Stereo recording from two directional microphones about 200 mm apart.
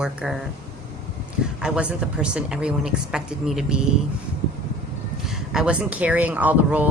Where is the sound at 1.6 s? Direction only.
5° right (ahead or behind).